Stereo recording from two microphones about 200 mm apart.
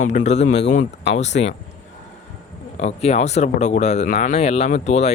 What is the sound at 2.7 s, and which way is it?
Speech, 30° left (ahead or behind).